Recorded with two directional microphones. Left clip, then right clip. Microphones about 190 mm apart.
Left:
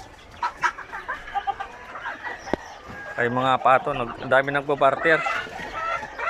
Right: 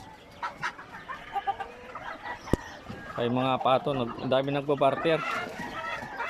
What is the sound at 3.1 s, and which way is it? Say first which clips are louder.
A man's voice: left 6 dB; 15° right (ahead or behind).